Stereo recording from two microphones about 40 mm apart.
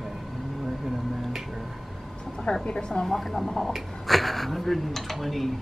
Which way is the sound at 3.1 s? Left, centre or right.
Centre.